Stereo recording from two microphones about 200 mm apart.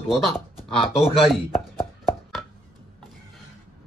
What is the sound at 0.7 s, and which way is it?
Speech, 30° left (ahead or behind).